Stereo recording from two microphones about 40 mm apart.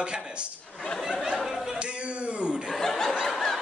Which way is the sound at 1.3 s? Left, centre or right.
Centre.